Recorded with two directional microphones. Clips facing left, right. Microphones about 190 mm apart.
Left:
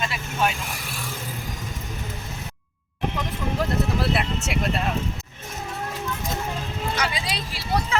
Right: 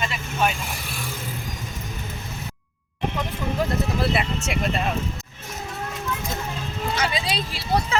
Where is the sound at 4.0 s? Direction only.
Centre (ahead or behind).